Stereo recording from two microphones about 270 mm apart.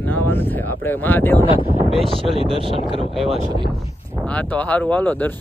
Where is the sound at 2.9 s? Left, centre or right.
Centre.